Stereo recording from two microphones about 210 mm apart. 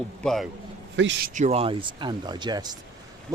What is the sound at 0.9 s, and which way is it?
Speech, 60° right (ahead or behind).